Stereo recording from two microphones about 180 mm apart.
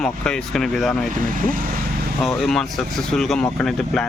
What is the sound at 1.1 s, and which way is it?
Speech, 50° right (ahead or behind).